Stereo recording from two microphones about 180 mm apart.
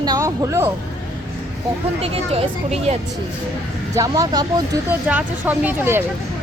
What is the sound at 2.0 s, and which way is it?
Speech, 30° right (ahead or behind).